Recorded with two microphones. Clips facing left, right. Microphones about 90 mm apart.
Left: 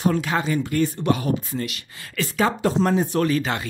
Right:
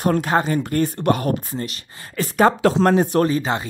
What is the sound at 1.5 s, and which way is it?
Speech, 35° right (ahead or behind).